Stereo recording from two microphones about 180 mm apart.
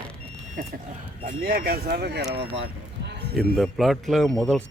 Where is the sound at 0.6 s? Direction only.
55° right (ahead or behind).